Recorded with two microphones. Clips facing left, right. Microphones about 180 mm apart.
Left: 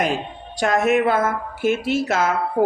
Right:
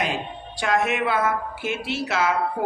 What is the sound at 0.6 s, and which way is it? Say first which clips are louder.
A man's voice: left 5 dB; 45° left (ahead or behind).